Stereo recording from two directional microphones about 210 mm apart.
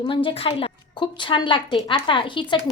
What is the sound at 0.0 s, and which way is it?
Speech, 25° left (ahead or behind).